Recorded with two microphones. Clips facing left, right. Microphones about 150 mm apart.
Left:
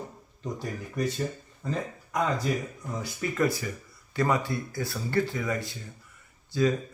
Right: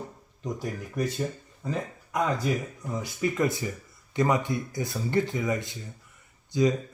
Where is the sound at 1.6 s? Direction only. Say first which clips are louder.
Even; 5° right (ahead or behind).